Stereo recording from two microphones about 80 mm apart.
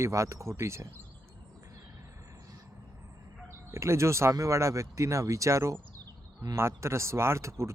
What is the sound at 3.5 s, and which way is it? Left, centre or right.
Speech, right.